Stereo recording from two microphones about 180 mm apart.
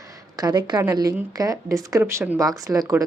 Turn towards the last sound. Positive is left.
turn(degrees=-20)  # may be behind; listen again after turning